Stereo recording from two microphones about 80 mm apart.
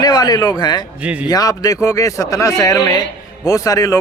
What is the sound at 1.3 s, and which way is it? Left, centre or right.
A man's voice, left.